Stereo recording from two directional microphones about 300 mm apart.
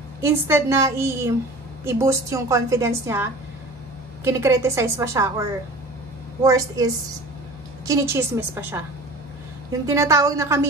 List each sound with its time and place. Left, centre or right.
0.2 s a woman's voice: centre